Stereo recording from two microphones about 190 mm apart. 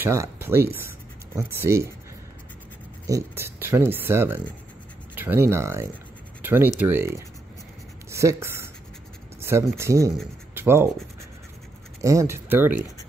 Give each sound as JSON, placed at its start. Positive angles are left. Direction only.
{"t": 0.0, "sound": "speech", "side_deg": -15}
{"t": 3.1, "sound": "speech", "side_deg": -15}
{"t": 8.1, "sound": "speech", "side_deg": -15}
{"t": 10.5, "sound": "scratch", "side_deg": -10}
{"t": 12.0, "sound": "speech", "side_deg": -15}